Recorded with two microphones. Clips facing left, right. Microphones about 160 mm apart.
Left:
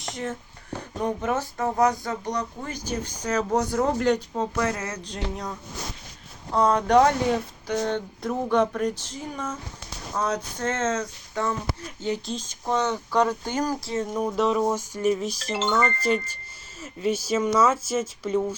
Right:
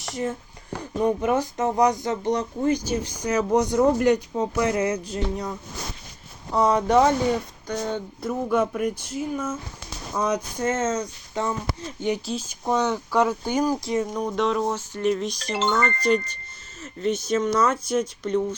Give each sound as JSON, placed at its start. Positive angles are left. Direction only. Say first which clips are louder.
{"t": 0.1, "sound": "speech", "louder": "right 4 dB", "side_deg": -5}
{"t": 2.8, "sound": "speech", "louder": "right 3 dB", "side_deg": -10}
{"t": 12.2, "sound": "speech", "louder": "right 3 dB", "side_deg": -5}
{"t": 14.1, "sound": "speech", "louder": "left 1 dB", "side_deg": 5}